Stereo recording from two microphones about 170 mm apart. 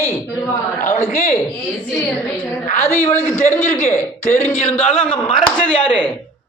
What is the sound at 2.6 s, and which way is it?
Speech, 45° left (ahead or behind).